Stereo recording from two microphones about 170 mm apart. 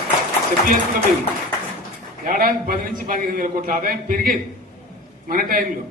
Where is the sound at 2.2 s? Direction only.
55° right (ahead or behind).